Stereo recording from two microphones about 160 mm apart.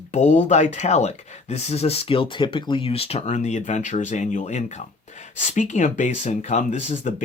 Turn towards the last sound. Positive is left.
turn(degrees=50)  # may be behind; listen again after turning